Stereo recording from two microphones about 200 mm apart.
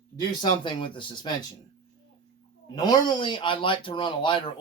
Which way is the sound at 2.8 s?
20° left (ahead or behind).